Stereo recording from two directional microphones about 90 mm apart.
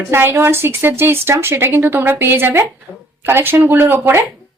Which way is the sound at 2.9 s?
Centre (ahead or behind).